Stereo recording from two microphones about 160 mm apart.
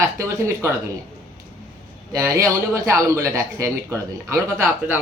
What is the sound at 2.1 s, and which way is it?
A man's voice, 20° right (ahead or behind).